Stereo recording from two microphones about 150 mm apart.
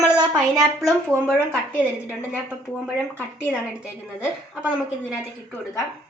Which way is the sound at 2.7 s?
Centre (ahead or behind).